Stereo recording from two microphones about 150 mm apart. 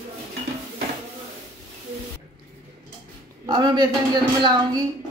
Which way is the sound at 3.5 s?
30° right (ahead or behind).